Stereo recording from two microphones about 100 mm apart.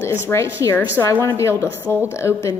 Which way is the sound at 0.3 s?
30° left (ahead or behind).